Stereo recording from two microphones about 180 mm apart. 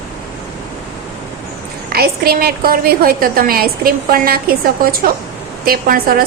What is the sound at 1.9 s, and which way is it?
A woman's voice, 60° right (ahead or behind).